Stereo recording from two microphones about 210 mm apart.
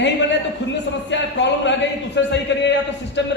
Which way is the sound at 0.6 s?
55° left (ahead or behind).